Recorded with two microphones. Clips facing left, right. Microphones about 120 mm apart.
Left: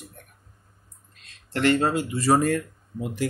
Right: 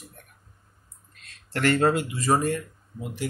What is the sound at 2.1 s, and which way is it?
Speech, 65° left (ahead or behind).